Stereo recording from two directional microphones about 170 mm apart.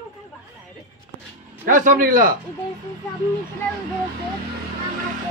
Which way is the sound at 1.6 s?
50° right (ahead or behind).